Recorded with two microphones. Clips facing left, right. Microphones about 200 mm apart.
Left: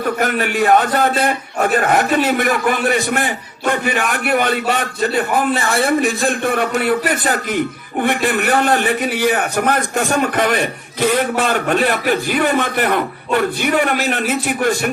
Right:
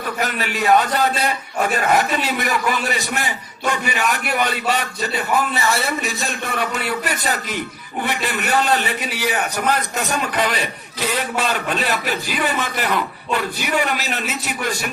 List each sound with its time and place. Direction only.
0.0 s a man's voice: 50° left (ahead or behind)